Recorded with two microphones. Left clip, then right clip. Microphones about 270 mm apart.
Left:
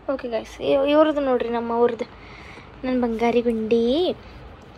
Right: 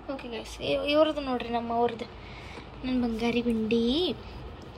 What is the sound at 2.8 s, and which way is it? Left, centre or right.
A woman's voice, centre.